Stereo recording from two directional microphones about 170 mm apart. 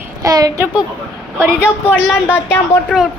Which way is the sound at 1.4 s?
10° left (ahead or behind).